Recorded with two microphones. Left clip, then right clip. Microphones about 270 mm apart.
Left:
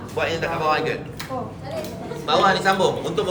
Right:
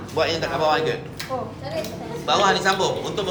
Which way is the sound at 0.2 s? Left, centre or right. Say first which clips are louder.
Right 2 dB; centre.